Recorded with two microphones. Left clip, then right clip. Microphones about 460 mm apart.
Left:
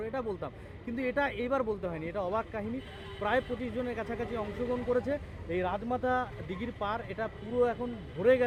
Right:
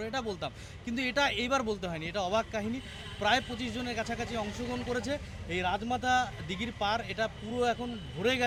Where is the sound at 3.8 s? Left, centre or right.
Right.